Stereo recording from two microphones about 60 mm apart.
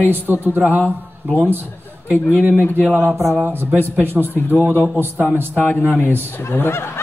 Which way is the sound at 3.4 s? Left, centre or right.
Right.